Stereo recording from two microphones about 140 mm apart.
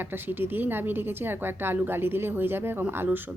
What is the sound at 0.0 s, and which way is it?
A woman's voice, 15° right (ahead or behind).